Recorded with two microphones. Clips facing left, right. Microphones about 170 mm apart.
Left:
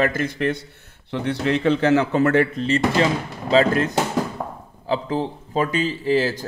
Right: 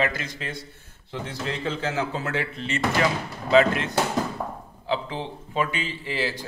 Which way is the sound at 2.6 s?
30° left (ahead or behind).